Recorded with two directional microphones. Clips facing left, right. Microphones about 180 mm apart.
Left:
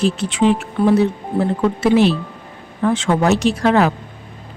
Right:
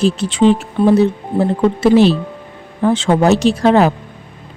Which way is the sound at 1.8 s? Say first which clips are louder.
Right 4 dB; 35° right (ahead or behind).